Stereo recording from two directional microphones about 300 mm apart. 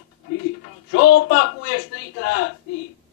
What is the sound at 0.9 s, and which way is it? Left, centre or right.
Speech, left.